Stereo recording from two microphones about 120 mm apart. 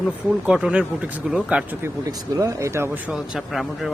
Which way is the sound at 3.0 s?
5° right (ahead or behind).